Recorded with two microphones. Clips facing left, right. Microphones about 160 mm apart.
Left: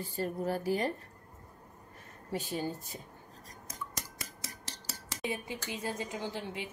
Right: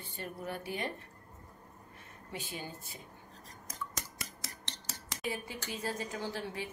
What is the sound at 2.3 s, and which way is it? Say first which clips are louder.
Speech: left 8 dB; 40° left (ahead or behind).